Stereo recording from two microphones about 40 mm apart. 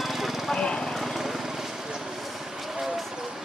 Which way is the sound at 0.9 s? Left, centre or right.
Centre.